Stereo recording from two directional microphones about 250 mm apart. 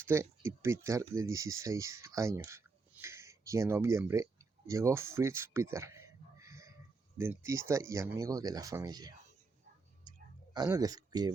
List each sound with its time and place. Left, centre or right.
0.0 s speech: centre
10.1 s whispering: centre